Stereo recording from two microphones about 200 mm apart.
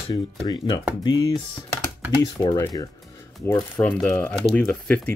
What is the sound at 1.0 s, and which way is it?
Speech, 20° left (ahead or behind).